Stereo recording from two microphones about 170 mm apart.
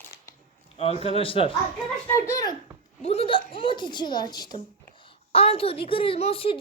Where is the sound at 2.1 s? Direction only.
20° left (ahead or behind).